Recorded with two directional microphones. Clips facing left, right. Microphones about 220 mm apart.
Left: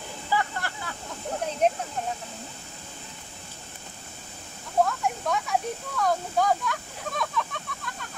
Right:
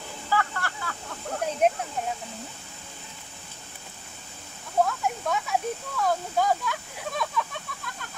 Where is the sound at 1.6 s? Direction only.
10° right (ahead or behind).